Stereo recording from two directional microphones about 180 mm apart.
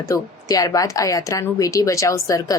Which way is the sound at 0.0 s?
20° left (ahead or behind).